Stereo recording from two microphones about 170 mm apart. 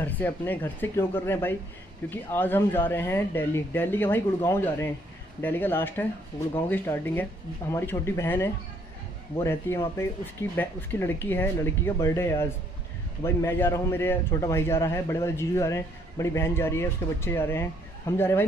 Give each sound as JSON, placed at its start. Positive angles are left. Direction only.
{"t": 0.0, "sound": "a man's voice", "side_deg": 10}